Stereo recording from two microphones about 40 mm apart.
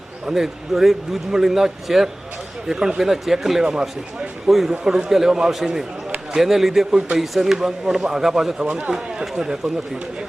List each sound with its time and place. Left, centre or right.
0.3 s speech: centre
4.4 s a man's voice: centre
4.8 s a man's voice: centre
8.6 s speech: right
9.0 s speech: centre